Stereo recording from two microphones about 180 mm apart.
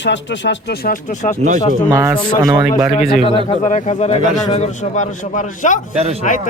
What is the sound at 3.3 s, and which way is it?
Speech, 30° left (ahead or behind).